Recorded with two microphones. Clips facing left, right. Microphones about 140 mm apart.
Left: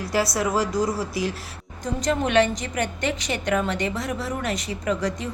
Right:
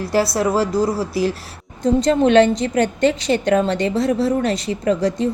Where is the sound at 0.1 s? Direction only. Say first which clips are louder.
Right 5 dB; 30° right (ahead or behind).